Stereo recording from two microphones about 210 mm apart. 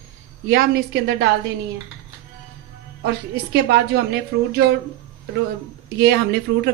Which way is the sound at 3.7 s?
50° right (ahead or behind).